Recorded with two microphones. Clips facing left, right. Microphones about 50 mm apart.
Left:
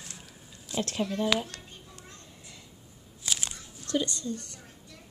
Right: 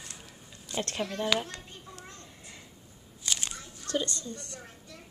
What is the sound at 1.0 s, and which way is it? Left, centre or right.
Speech, right.